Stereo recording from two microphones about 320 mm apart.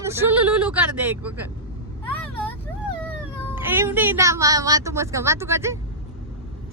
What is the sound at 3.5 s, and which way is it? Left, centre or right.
Speech, centre.